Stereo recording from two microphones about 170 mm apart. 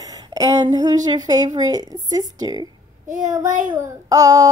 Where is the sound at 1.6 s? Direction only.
25° right (ahead or behind).